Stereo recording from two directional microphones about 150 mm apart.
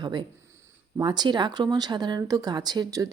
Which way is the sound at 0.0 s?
30° right (ahead or behind).